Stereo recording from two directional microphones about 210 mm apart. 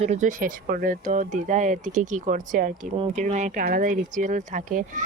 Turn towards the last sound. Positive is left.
turn(degrees=-40)  # may be behind; listen again after turning